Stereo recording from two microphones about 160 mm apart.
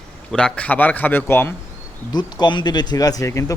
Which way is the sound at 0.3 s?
5° left (ahead or behind).